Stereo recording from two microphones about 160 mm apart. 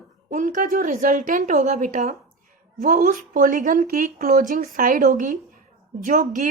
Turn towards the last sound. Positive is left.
turn(degrees=-55)  # may be behind; listen again after turning